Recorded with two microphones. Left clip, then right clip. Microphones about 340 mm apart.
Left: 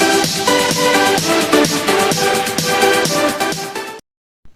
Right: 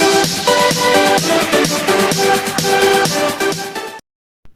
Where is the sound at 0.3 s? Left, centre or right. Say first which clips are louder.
Right 2 dB; centre.